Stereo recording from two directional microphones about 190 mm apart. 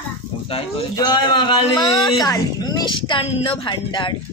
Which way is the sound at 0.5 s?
30° left (ahead or behind).